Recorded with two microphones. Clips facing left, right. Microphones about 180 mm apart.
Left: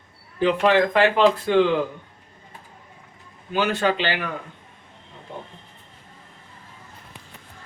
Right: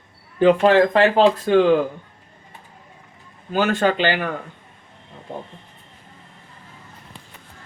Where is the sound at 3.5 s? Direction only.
45° right (ahead or behind).